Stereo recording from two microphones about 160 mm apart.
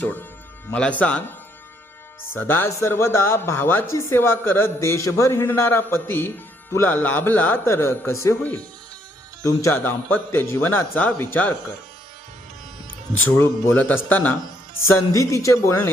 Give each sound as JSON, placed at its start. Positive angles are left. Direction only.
{"t": 0.0, "sound": "speech", "side_deg": 10}
{"t": 2.3, "sound": "speech", "side_deg": 15}
{"t": 9.4, "sound": "speech", "side_deg": 20}
{"t": 13.2, "sound": "speech", "side_deg": 15}